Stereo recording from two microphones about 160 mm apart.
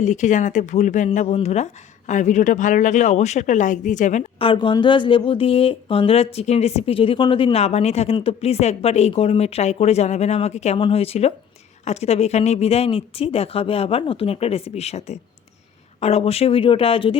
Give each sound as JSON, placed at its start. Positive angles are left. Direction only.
{"t": 0.0, "sound": "speech", "side_deg": 50}
{"t": 4.4, "sound": "speech", "side_deg": 35}